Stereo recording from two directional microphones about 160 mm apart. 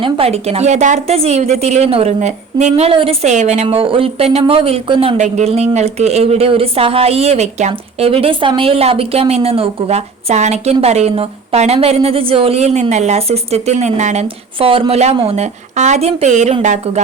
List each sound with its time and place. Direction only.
0.0 s a woman's voice: 40° right (ahead or behind)